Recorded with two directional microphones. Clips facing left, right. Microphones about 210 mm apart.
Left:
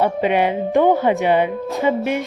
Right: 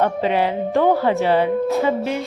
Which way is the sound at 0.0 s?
15° left (ahead or behind).